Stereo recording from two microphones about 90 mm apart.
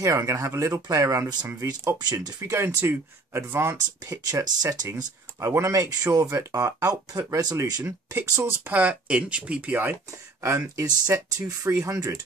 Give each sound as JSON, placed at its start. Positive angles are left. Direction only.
{"t": 0.0, "sound": "speech", "side_deg": -35}
{"t": 2.5, "sound": "speech", "side_deg": -30}
{"t": 4.3, "sound": "speech", "side_deg": -45}
{"t": 6.5, "sound": "speech", "side_deg": -30}
{"t": 6.9, "sound": "speech", "side_deg": -40}
{"t": 7.8, "sound": "speech", "side_deg": -25}
{"t": 10.4, "sound": "speech", "side_deg": -30}